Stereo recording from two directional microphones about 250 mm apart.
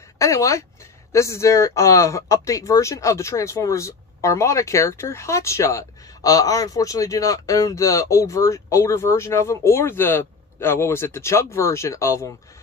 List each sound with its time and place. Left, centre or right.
0.2 s speech: centre